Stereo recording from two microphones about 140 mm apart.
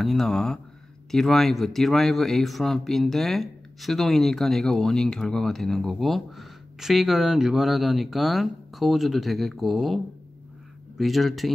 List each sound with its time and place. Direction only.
0.0 s speech: centre (ahead or behind)